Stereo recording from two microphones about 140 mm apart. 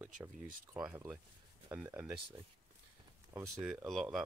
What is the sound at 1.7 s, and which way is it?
Speech, 10° right (ahead or behind).